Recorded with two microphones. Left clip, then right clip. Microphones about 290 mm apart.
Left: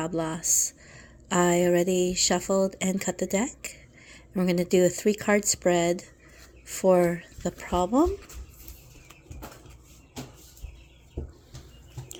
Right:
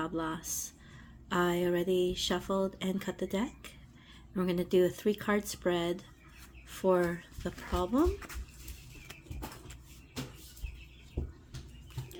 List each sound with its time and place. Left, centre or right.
0.0 s speech: left